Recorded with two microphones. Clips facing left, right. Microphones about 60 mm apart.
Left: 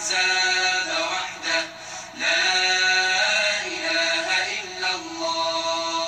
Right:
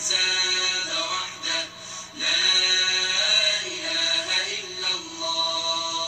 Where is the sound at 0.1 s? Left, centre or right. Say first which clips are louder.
Left 5 dB; left.